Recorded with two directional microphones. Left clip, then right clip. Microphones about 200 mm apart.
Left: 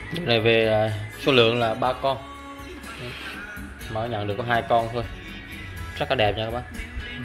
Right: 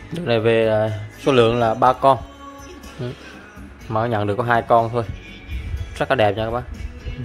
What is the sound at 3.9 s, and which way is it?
Speech, 35° right (ahead or behind).